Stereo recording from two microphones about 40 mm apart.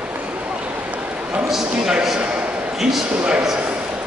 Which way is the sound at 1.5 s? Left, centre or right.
Centre.